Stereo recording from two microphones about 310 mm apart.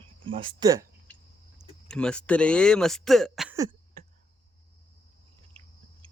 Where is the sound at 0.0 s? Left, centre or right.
Centre.